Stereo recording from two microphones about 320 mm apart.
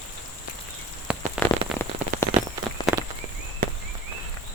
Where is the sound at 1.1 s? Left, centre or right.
Centre.